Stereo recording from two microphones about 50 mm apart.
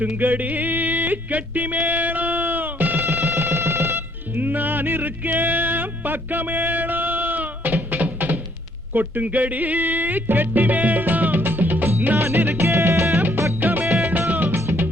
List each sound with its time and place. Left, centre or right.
0.0 s yodeling: right
3.0 s music: right
4.4 s music: right
12.4 s music: right
13.6 s music: right
13.8 s music: centre
14.1 s music: right
14.5 s music: right